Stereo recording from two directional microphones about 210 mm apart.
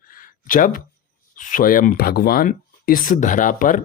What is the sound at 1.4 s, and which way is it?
Speech, 40° left (ahead or behind).